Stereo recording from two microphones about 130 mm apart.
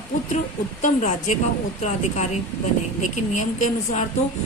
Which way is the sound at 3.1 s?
70° left (ahead or behind).